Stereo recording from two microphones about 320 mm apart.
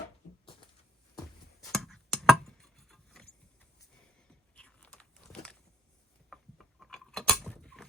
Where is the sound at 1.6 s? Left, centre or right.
Centre.